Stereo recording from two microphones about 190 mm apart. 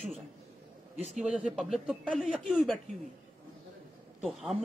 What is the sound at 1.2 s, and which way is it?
Speech, 5° right (ahead or behind).